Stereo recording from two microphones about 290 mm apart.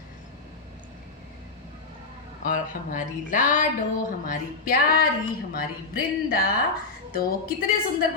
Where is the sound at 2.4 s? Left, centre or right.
Left.